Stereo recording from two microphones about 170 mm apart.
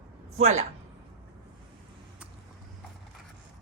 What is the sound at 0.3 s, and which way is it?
Speech, 40° right (ahead or behind).